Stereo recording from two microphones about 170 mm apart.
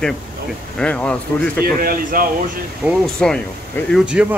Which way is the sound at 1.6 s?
55° right (ahead or behind).